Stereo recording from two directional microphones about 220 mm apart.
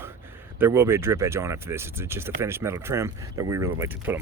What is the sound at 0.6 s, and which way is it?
Speech, 10° right (ahead or behind).